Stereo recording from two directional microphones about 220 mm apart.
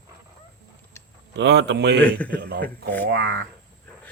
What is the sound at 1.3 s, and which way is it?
Speech, 50° right (ahead or behind).